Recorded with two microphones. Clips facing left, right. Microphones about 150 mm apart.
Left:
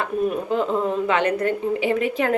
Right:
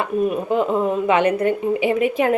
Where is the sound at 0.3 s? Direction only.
10° right (ahead or behind).